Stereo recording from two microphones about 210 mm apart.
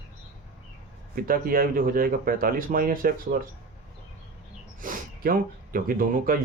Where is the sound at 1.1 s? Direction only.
45° right (ahead or behind).